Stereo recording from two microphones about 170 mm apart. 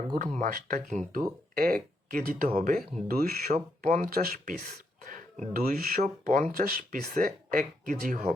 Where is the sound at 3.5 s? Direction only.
45° right (ahead or behind).